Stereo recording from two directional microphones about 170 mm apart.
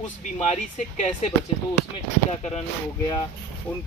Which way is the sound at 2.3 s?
40° left (ahead or behind).